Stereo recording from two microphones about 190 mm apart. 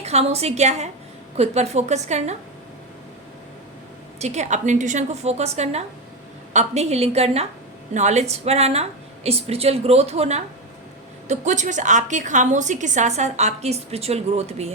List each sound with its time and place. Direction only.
0.0 s a woman's voice: 35° right (ahead or behind)
4.2 s a woman's voice: 35° right (ahead or behind)